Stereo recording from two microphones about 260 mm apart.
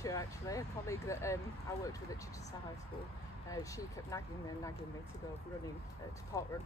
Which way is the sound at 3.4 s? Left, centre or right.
Centre.